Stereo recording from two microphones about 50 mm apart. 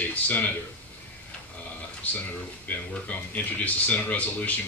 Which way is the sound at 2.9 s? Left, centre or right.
Left.